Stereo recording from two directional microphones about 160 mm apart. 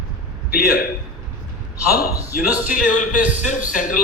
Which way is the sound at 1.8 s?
70° left (ahead or behind).